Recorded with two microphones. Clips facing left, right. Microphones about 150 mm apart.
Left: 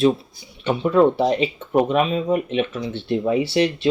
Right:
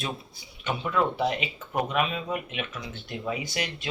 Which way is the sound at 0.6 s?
35° left (ahead or behind).